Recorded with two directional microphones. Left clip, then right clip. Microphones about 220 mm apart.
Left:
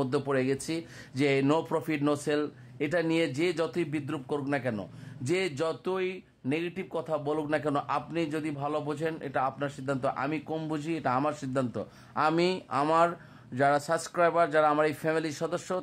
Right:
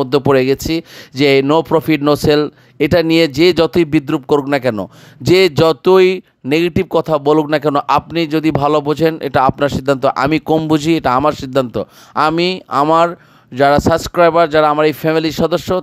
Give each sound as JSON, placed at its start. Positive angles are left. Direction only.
{"t": 0.0, "sound": "speech", "side_deg": -40}